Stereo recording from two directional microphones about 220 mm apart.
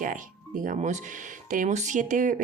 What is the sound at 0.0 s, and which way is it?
Speech, 40° right (ahead or behind).